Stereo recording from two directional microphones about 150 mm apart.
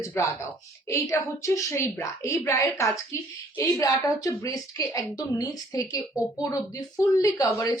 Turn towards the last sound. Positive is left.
turn(degrees=20)  # may be behind; listen again after turning